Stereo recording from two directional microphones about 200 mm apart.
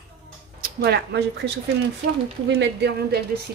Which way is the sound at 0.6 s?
50° right (ahead or behind).